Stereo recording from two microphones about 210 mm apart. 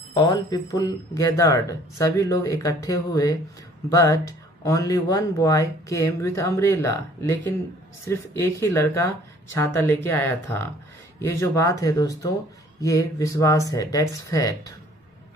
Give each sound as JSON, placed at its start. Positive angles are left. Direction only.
{"t": 0.1, "sound": "speech", "side_deg": 15}